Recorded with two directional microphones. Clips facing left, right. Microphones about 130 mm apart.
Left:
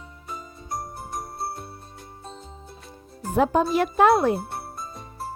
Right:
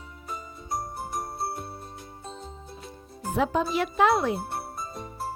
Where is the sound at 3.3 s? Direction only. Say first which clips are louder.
Left 5 dB; 50° left (ahead or behind).